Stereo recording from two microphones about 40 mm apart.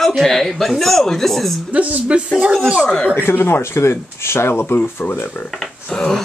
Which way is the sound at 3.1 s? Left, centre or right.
Left.